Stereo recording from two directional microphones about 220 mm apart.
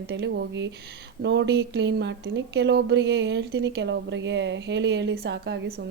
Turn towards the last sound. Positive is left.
turn(degrees=-50)  # may be behind; listen again after turning